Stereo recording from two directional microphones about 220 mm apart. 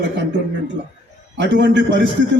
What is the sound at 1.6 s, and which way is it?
Speech, 55° right (ahead or behind).